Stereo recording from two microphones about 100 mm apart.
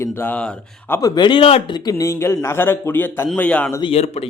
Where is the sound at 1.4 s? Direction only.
75° left (ahead or behind).